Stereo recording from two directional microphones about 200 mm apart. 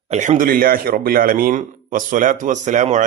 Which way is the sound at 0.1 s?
40° right (ahead or behind).